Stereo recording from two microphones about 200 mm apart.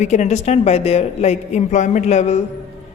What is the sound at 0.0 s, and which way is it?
A man's voice, 35° left (ahead or behind).